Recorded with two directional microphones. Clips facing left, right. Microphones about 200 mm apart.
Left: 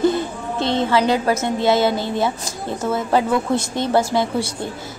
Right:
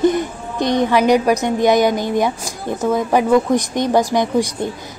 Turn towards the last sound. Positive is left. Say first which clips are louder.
# right 4 dB
turn(degrees=-15)  # may be behind; listen again after turning